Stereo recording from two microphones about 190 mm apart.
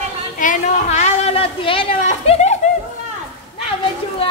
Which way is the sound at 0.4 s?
40° left (ahead or behind).